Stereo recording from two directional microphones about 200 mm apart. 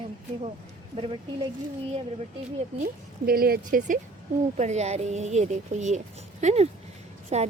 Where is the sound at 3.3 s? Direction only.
50° right (ahead or behind).